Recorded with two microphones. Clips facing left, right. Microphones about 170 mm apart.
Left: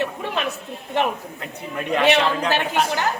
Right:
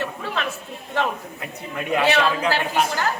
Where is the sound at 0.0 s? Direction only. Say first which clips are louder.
Left 2 dB; 20° left (ahead or behind).